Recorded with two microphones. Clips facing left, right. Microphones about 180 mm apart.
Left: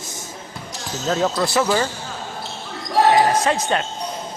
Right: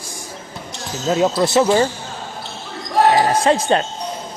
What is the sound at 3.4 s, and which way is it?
Speech, 30° right (ahead or behind).